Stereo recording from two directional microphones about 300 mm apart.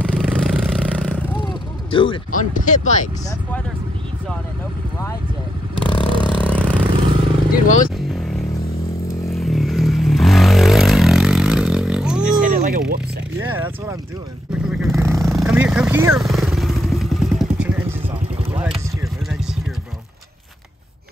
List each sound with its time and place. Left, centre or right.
0.0 s vehicle: centre
1.9 s speech: centre
5.8 s vehicle: centre
6.4 s vehicle: centre
7.5 s speech: left
9.3 s vehicle: centre
12.4 s a sound: right
13.4 s vehicle: centre